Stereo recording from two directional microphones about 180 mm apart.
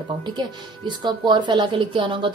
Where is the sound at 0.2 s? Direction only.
25° right (ahead or behind).